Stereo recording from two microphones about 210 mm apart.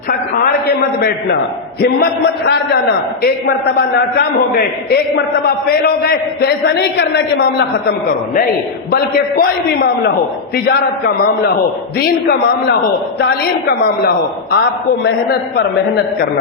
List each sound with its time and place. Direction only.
1.8 s a man's voice: 50° left (ahead or behind)
3.8 s a man's voice: 50° left (ahead or behind)
8.9 s a man's voice: 50° left (ahead or behind)